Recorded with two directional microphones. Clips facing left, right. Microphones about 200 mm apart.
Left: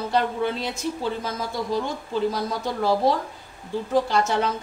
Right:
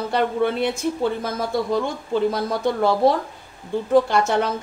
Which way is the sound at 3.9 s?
55° right (ahead or behind).